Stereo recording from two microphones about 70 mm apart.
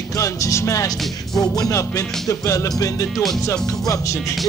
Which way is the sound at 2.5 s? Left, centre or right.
Left.